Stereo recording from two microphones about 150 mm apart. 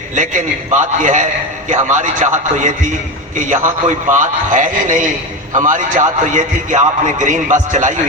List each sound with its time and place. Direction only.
0.2 s a man's voice: 55° right (ahead or behind)
3.3 s a man's voice: 55° right (ahead or behind)